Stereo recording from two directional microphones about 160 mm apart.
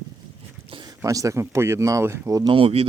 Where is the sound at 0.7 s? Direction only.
25° right (ahead or behind).